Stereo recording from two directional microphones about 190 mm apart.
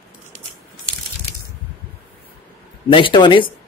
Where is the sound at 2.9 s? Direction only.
25° left (ahead or behind).